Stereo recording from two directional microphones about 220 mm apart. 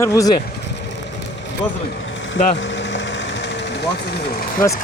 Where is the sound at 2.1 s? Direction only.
55° left (ahead or behind).